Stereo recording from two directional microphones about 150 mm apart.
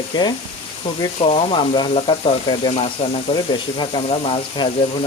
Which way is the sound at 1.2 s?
45° left (ahead or behind).